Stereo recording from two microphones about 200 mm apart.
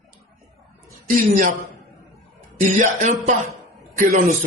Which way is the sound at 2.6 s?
40° right (ahead or behind).